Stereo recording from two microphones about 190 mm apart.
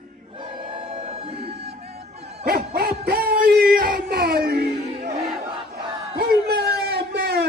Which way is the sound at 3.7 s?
50° right (ahead or behind).